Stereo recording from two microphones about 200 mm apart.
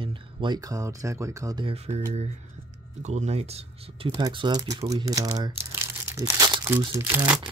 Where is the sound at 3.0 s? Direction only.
35° right (ahead or behind); by 7.4 s 10° right (ahead or behind).